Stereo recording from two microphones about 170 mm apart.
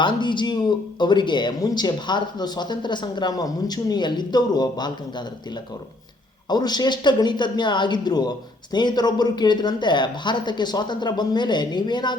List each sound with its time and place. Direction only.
0.0 s speech: 25° left (ahead or behind)
6.5 s speech: 25° left (ahead or behind)